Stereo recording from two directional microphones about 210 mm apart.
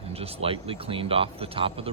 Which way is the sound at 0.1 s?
30° right (ahead or behind).